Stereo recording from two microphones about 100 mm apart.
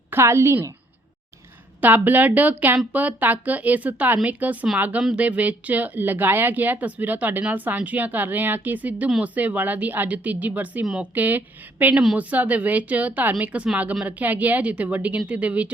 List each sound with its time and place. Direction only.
0.1 s a woman's voice: 25° right (ahead or behind)
1.8 s speech: 15° right (ahead or behind)